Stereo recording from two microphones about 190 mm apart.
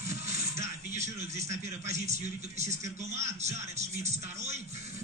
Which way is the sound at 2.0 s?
35° right (ahead or behind).